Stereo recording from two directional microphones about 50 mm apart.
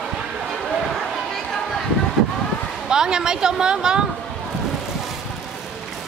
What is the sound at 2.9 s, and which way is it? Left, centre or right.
Speech, centre.